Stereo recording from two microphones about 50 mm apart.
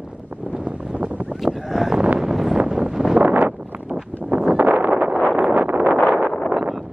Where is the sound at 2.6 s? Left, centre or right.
Centre.